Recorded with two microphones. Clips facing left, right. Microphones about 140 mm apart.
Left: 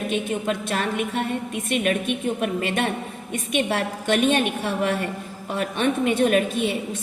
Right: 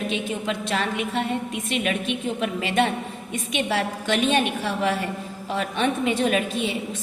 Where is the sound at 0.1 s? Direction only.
55° left (ahead or behind).